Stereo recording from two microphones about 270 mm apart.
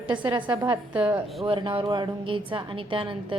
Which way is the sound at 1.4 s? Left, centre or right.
Centre.